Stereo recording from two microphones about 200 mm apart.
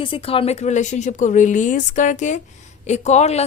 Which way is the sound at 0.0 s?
25° left (ahead or behind).